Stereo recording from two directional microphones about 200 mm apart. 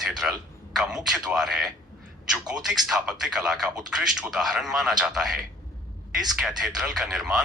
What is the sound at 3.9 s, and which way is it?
A man's voice, centre (ahead or behind).